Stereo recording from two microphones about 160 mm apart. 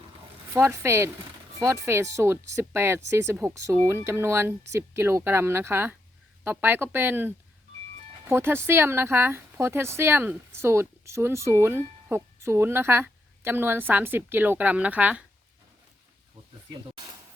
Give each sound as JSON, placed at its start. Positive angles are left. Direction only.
{"t": 0.5, "sound": "speech", "side_deg": -15}